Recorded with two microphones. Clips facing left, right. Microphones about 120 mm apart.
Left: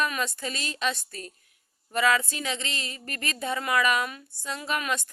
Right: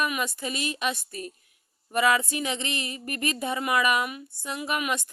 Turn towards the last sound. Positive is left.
turn(degrees=-15)  # may be behind; listen again after turning